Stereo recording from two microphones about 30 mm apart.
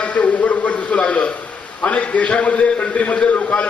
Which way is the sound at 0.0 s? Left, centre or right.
Left.